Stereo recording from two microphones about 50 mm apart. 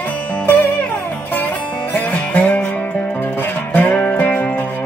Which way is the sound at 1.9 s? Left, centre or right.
Left.